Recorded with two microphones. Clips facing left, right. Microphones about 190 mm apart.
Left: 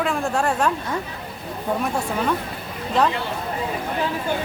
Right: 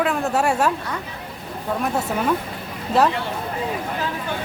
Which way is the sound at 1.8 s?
5° right (ahead or behind).